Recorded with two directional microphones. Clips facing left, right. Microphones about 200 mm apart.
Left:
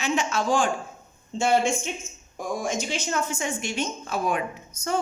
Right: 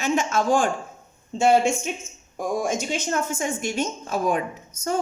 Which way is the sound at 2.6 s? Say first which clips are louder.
Right 3 dB; 45° right (ahead or behind).